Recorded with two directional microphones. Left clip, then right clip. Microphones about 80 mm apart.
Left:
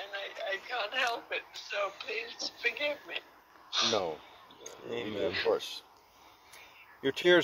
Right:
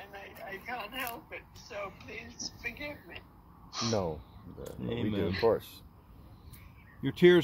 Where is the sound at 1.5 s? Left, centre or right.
Left.